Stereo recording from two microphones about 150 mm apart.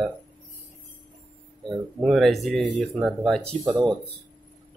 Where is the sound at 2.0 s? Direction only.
Centre (ahead or behind).